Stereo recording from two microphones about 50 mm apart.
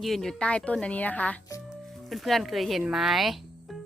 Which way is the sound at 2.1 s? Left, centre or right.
Centre.